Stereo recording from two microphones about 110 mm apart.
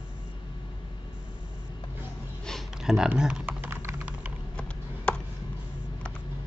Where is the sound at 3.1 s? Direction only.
10° right (ahead or behind).